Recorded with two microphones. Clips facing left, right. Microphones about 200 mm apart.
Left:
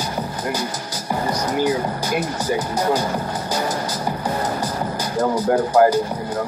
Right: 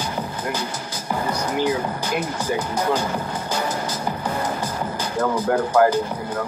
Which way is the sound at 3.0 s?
35° left (ahead or behind).